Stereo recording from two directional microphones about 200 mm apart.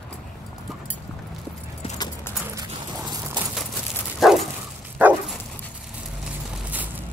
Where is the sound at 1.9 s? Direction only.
20° left (ahead or behind).